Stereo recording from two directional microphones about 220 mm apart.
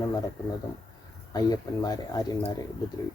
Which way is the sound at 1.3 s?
15° left (ahead or behind).